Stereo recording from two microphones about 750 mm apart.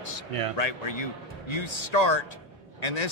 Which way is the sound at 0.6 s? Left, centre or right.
Left.